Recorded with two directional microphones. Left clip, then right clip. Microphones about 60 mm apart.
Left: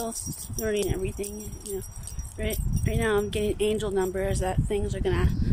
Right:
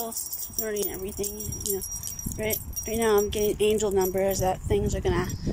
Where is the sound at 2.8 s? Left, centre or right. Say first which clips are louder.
Right 3 dB; centre.